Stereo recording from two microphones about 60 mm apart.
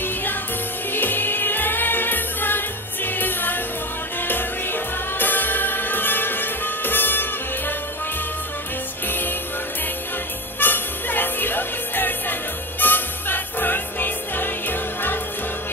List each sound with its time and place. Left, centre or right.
0.0 s music: left
9.0 s music: left
10.6 s music: left